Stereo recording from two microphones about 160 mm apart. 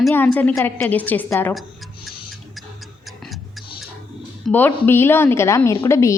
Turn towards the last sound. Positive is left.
turn(degrees=20)  # may be behind; listen again after turning